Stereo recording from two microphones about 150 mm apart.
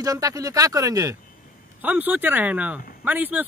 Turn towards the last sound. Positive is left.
turn(degrees=-10)  # may be behind; listen again after turning